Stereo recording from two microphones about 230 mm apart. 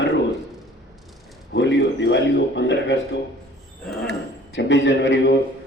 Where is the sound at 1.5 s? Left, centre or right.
Left.